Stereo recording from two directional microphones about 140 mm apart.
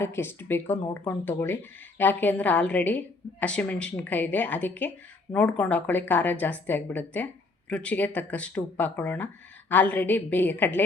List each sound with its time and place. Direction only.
0.0 s speech: 15° left (ahead or behind)